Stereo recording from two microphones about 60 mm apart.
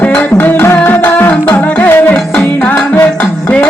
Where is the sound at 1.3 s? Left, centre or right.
Left.